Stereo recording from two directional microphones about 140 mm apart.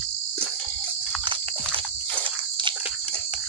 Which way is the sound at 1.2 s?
35° right (ahead or behind).